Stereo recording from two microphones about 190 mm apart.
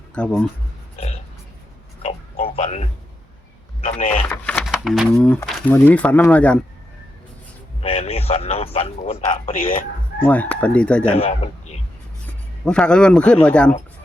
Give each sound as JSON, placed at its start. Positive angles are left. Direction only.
{"t": 0.1, "sound": "speech", "side_deg": 5}
{"t": 2.0, "sound": "a sound", "side_deg": 35}
{"t": 3.8, "sound": "speech", "side_deg": 40}
{"t": 4.1, "sound": "speech", "side_deg": 10}
{"t": 7.8, "sound": "a man's voice", "side_deg": 35}
{"t": 10.2, "sound": "speech", "side_deg": 10}
{"t": 11.2, "sound": "a man's voice", "side_deg": 35}
{"t": 12.2, "sound": "speech", "side_deg": 5}